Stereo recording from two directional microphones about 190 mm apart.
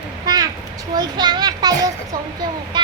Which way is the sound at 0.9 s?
20° right (ahead or behind).